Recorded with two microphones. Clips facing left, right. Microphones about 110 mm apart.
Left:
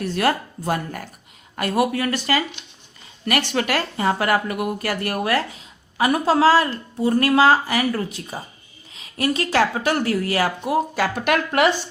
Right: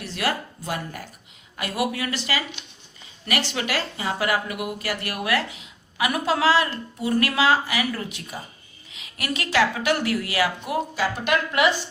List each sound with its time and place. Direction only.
0.0 s speech: 50° left (ahead or behind)
10.9 s a woman's voice: 60° left (ahead or behind)